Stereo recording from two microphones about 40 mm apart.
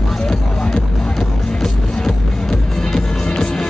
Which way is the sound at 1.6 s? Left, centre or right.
Centre.